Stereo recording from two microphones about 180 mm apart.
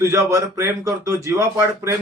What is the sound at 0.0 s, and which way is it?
Speech, 15° right (ahead or behind).